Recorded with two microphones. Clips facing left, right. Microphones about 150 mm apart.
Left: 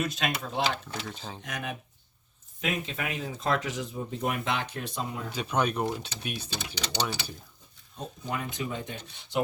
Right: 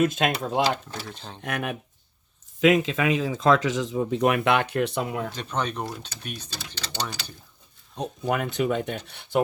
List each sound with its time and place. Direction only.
0.0 s speech: 50° right (ahead or behind)
1.0 s speech: 5° left (ahead or behind)
1.4 s speech: 60° right (ahead or behind)
2.6 s speech: 90° right; by 5.3 s 75° right (ahead or behind)
5.3 s speech: 10° left (ahead or behind)
7.9 s speech: 75° right (ahead or behind); by 9.4 s 60° right (ahead or behind)